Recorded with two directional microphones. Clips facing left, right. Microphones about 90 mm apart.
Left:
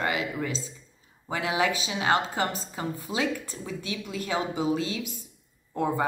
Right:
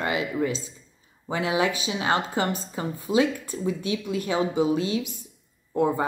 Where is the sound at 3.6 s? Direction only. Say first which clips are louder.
Right 7 dB; 25° right (ahead or behind).